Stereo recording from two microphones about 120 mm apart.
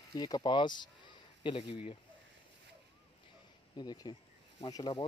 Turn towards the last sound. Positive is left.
turn(degrees=40)  # may be behind; listen again after turning